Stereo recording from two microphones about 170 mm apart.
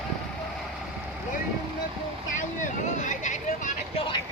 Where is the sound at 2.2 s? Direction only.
50° left (ahead or behind).